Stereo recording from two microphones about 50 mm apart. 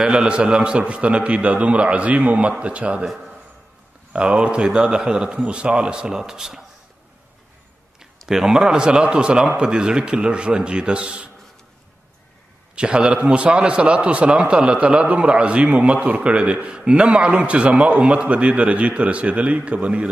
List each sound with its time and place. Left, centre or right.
0.0 s a man's voice: centre
3.1 s a man's voice: centre
4.1 s a man's voice: centre
8.0 s a man's voice: centre
12.7 s a man's voice: centre